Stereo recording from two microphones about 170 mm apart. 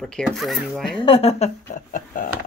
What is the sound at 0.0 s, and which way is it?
Speech, 5° left (ahead or behind).